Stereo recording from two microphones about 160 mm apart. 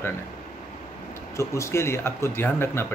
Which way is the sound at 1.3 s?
20° left (ahead or behind).